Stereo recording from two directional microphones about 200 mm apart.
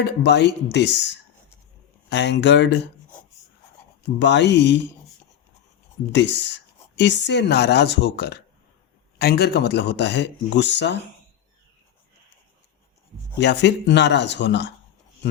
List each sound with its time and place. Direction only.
0.0 s speech: 60° left (ahead or behind)
4.2 s speech: 60° left (ahead or behind)
6.1 s speech: 60° left (ahead or behind)
13.4 s speech: 60° left (ahead or behind)